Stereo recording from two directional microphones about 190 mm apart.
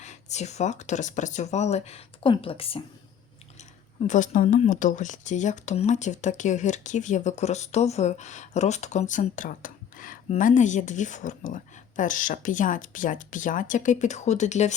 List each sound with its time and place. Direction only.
0.0 s speech: 35° left (ahead or behind)
3.6 s speech: 40° left (ahead or behind)